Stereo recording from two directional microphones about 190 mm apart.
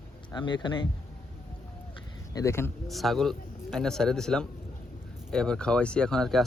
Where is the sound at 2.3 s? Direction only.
15° left (ahead or behind).